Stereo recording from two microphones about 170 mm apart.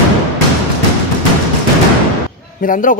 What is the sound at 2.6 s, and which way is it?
Speech, 50° left (ahead or behind).